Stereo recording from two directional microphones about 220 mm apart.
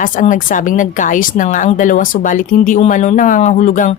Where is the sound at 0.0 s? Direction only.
35° left (ahead or behind).